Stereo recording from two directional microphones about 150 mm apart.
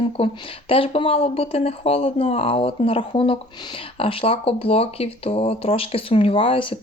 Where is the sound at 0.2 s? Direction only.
40° left (ahead or behind).